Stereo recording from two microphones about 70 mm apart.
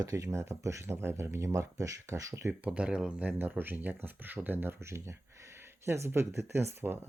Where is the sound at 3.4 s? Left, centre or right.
Right.